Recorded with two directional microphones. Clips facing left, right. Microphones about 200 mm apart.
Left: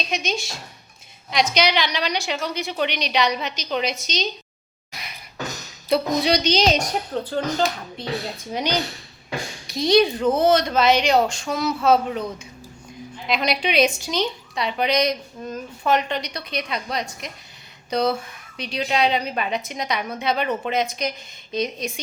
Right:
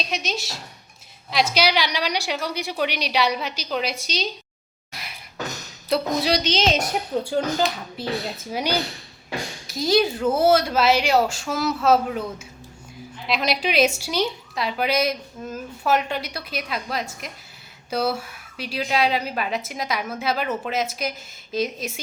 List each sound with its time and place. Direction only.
0.1 s a woman's voice: 5° right (ahead or behind)
4.9 s beatboxing: centre (ahead or behind)
5.9 s a woman's voice: centre (ahead or behind)